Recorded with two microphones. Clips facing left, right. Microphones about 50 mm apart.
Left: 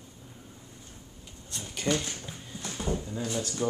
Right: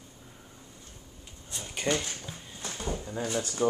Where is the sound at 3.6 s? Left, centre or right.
Centre.